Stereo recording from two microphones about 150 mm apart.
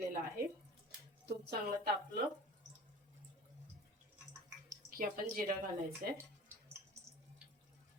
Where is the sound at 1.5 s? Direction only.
90° right.